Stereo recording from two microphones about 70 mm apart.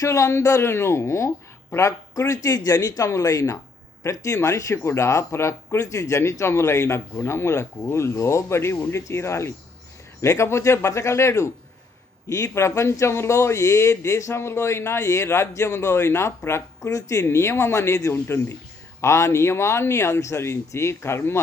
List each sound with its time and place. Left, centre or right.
0.0 s a man's voice: left
3.1 s a man's voice: left
17.2 s speech: left